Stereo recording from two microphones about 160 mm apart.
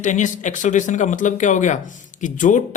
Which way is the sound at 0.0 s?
50° left (ahead or behind).